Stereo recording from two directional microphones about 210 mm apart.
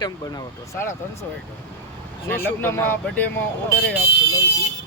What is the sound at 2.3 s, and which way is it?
Speech, 10° left (ahead or behind).